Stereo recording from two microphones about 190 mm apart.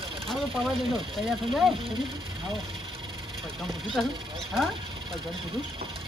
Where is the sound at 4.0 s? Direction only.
Centre (ahead or behind).